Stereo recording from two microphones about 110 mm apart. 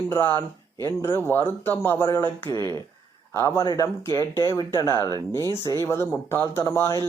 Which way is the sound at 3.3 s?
25° left (ahead or behind).